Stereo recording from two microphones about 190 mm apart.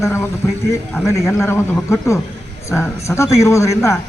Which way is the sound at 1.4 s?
15° left (ahead or behind).